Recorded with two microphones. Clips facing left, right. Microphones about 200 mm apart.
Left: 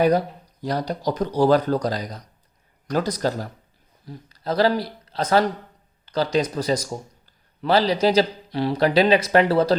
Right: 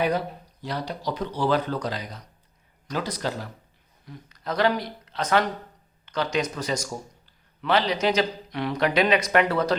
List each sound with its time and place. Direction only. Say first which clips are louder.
0.6 s speech: left 6 dB; 40° left (ahead or behind)